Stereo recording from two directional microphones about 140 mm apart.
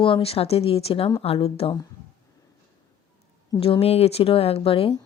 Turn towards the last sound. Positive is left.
turn(degrees=40)  # may be behind; listen again after turning